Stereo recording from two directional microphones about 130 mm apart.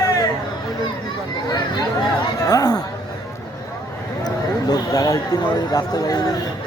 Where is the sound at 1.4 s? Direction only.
35° left (ahead or behind).